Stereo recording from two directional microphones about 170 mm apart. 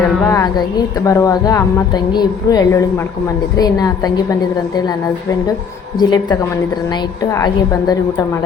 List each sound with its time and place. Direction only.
0.3 s a sound: 20° left (ahead or behind)
1.0 s a woman's voice: 20° left (ahead or behind)
6.0 s a woman's voice: 25° left (ahead or behind)